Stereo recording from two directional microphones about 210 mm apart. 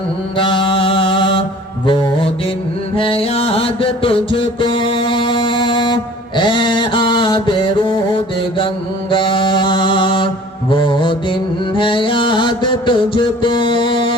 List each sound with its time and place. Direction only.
0.3 s mantra: 25° left (ahead or behind)
2.9 s music: 25° left (ahead or behind)